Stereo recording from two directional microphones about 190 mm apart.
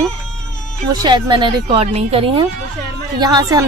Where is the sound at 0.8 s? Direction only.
25° right (ahead or behind).